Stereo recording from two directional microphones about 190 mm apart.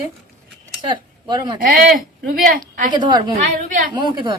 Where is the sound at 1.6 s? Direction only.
50° right (ahead or behind).